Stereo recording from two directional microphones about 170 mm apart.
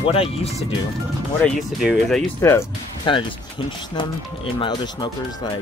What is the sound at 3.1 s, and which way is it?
Speech, 30° left (ahead or behind).